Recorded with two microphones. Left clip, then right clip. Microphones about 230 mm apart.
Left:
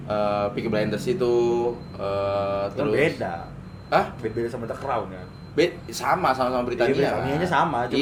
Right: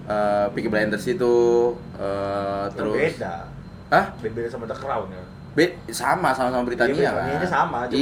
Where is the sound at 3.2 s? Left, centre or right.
Left.